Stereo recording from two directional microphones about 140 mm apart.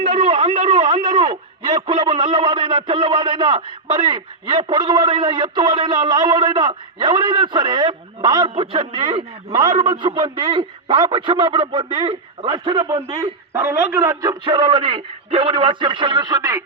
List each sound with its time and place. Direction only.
0.0 s a man's voice: 40° right (ahead or behind)
9.7 s a man's voice: 45° right (ahead or behind)
13.0 s a man's voice: 15° right (ahead or behind)